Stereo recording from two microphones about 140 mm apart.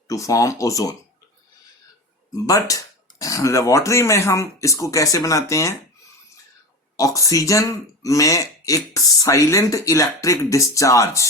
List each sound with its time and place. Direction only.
0.1 s speech: 25° left (ahead or behind)
2.3 s speech: 25° left (ahead or behind)
6.9 s speech: 25° left (ahead or behind)